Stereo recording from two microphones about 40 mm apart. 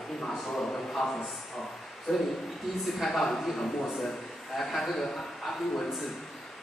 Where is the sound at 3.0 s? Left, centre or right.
Centre.